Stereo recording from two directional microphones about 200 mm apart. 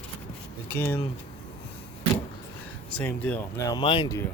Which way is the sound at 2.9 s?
5° left (ahead or behind).